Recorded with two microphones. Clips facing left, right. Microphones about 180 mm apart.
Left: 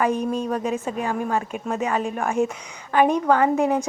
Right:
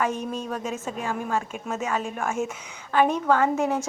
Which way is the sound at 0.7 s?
Centre (ahead or behind).